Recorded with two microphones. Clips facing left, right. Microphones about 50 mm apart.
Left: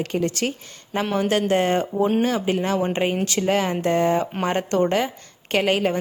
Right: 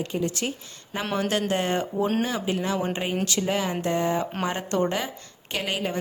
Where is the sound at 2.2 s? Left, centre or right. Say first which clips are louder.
Left 5 dB; left.